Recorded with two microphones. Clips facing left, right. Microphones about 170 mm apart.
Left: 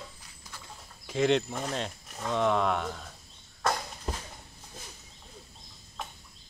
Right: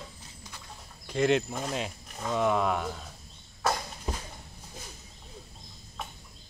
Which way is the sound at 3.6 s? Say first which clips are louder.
Right 1 dB; 5° right (ahead or behind).